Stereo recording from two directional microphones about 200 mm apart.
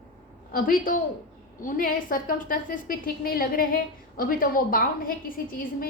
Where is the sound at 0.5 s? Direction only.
45° left (ahead or behind).